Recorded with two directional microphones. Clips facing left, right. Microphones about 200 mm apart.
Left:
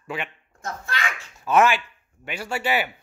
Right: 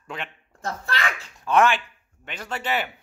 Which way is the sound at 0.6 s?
35° right (ahead or behind).